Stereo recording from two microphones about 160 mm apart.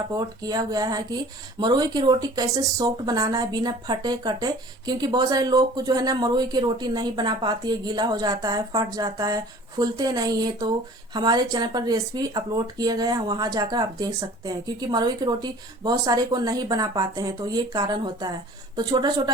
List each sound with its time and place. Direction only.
0.1 s speech: 25° right (ahead or behind)